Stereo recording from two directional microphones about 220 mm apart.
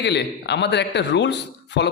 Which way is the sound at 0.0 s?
50° left (ahead or behind).